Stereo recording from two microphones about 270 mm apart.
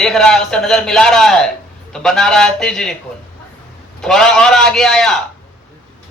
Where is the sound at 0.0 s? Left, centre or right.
Centre.